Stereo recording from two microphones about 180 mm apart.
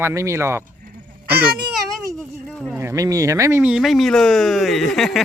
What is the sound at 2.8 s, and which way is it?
Speech, 15° right (ahead or behind).